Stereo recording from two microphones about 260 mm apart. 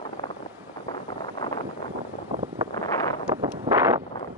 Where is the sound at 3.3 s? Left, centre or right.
Centre.